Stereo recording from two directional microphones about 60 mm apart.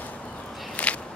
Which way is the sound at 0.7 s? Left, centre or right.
Left.